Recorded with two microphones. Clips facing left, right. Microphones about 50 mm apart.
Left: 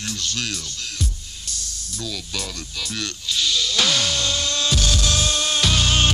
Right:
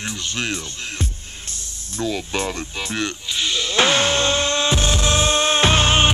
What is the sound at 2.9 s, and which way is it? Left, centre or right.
Music, right.